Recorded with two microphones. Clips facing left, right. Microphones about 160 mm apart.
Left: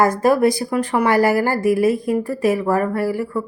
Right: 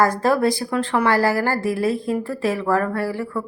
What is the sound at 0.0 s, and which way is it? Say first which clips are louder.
A woman's voice: left 3 dB; 20° left (ahead or behind).